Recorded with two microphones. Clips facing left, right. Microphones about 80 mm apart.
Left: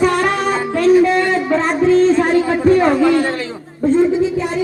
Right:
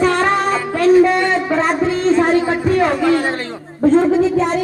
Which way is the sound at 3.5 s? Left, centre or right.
Right.